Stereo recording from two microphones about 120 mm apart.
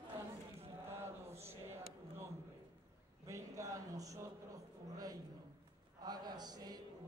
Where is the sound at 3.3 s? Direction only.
25° right (ahead or behind).